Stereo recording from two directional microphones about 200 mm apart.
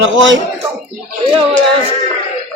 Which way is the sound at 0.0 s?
70° right (ahead or behind).